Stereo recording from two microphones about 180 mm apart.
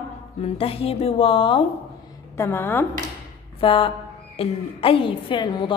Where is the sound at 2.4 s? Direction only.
15° left (ahead or behind).